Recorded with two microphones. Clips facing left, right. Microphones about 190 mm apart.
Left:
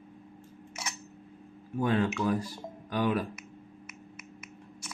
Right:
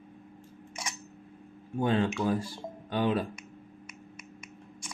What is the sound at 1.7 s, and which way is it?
Speech, 25° right (ahead or behind).